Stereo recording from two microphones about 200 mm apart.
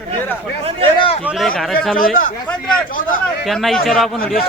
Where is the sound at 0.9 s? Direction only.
30° left (ahead or behind).